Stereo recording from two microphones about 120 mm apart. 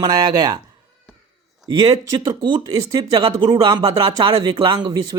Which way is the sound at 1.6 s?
35° right (ahead or behind).